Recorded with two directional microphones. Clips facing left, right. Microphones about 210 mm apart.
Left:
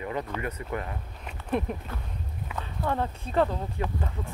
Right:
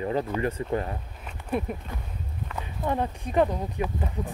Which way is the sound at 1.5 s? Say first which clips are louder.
Even; 5° right (ahead or behind).